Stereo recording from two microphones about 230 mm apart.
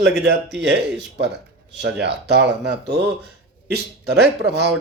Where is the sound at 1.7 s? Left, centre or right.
Right.